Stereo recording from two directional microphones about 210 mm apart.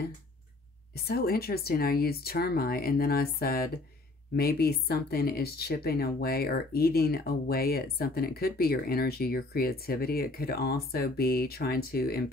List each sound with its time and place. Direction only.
1.0 s speech: 45° left (ahead or behind)